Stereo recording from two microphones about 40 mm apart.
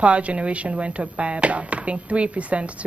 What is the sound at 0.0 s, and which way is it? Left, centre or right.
Speech, right.